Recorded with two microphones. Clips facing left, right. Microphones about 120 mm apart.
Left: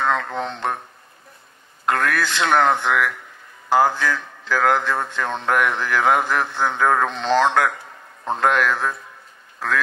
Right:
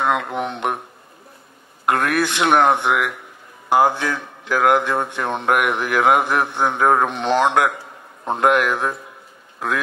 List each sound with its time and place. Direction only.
0.0 s speech: 15° right (ahead or behind)
1.9 s speech: 15° right (ahead or behind)